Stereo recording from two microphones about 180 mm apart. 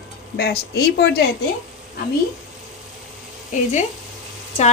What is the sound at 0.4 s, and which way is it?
Speech, 60° left (ahead or behind).